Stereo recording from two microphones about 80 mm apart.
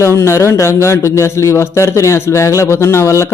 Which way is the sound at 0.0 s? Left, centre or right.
Left.